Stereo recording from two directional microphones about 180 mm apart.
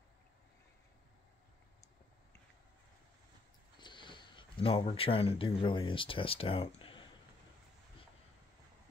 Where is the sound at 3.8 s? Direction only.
25° left (ahead or behind).